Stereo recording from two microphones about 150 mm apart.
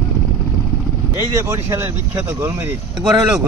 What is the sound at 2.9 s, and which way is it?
Speech, 5° right (ahead or behind).